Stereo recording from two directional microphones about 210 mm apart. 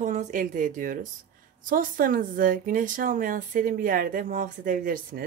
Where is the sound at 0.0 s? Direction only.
35° right (ahead or behind).